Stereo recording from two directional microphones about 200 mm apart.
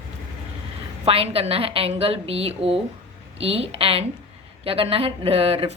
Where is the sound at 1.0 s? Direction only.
30° right (ahead or behind).